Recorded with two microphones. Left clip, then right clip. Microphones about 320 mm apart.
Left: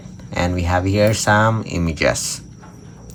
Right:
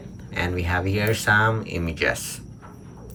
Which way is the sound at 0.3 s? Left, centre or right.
Centre.